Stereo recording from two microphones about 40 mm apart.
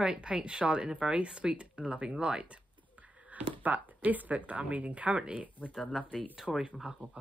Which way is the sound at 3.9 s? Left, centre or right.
Right.